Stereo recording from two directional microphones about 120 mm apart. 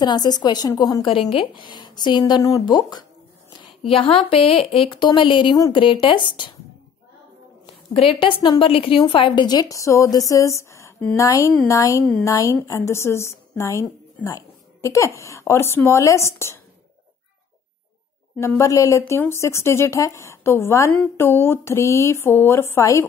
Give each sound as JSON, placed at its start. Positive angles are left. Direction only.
{"t": 0.0, "sound": "a woman's voice", "side_deg": 35}
{"t": 1.3, "sound": "a woman's voice", "side_deg": 45}
{"t": 3.9, "sound": "speech", "side_deg": 50}
{"t": 7.9, "sound": "a woman's voice", "side_deg": 50}
{"t": 18.4, "sound": "speech", "side_deg": 25}